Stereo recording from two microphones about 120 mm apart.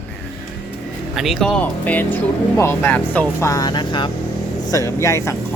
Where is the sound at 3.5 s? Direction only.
30° left (ahead or behind).